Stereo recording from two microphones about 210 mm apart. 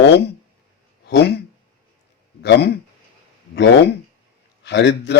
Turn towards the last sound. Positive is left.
turn(degrees=55)  # may be behind; listen again after turning